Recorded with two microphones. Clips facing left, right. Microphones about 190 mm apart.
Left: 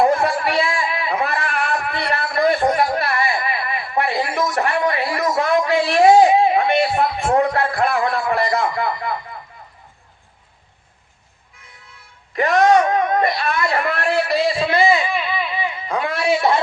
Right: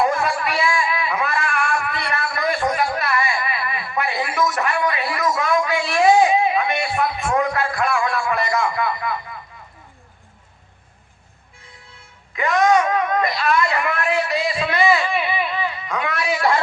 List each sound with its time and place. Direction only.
0.0 s a sound: 30° left (ahead or behind)
12.5 s speech: 35° left (ahead or behind)
15.1 s baby cry: 5° right (ahead or behind)
15.9 s a man's voice: 30° left (ahead or behind)